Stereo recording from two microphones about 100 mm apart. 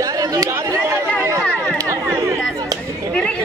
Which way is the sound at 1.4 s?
10° left (ahead or behind).